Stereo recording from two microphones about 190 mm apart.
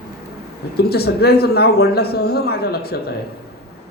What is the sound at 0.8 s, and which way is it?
A man's voice, 55° left (ahead or behind).